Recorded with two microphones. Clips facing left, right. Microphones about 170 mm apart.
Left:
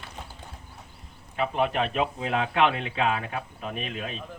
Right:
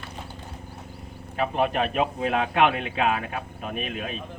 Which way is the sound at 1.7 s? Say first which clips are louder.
Right 2 dB; 25° left (ahead or behind).